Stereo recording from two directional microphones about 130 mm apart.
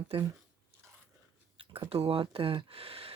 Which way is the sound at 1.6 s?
45° right (ahead or behind).